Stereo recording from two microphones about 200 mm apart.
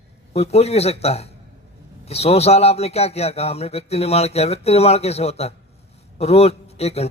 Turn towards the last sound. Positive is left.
turn(degrees=30)  # may be behind; listen again after turning